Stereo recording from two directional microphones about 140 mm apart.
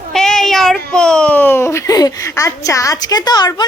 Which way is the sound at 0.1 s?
5° left (ahead or behind).